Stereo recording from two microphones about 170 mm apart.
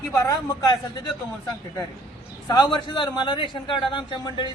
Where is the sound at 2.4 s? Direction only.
25° left (ahead or behind).